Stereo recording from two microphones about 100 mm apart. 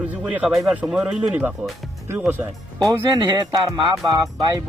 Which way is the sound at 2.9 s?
40° right (ahead or behind).